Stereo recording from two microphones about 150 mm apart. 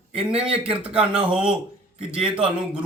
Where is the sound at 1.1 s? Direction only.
35° right (ahead or behind).